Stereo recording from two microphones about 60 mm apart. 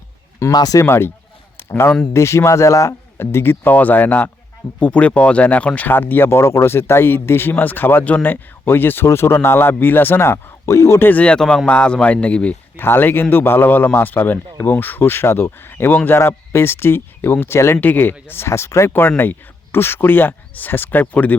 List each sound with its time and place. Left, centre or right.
0.4 s a man's voice: left
2.1 s speech: left
3.2 s a man's voice: left
11.0 s speech: left
11.3 s speech: centre
12.7 s a man's voice: left
17.7 s speech: left
18.9 s speech: left